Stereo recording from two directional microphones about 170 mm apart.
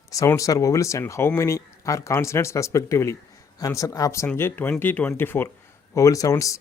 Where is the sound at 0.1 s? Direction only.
20° left (ahead or behind).